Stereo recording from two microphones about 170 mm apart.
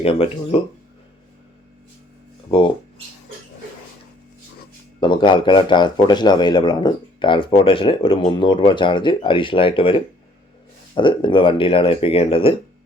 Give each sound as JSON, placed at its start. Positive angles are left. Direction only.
{"t": 0.0, "sound": "speech", "side_deg": 35}
{"t": 2.5, "sound": "speech", "side_deg": 30}
{"t": 4.9, "sound": "speech", "side_deg": 30}